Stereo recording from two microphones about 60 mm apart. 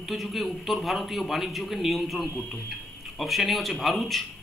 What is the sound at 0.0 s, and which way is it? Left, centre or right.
Speech, centre.